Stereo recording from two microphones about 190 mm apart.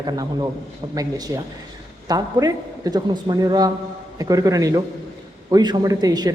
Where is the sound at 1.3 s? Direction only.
15° right (ahead or behind).